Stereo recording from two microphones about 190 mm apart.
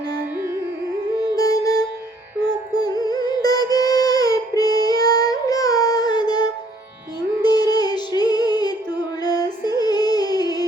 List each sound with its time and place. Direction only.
1.4 s music: 20° left (ahead or behind)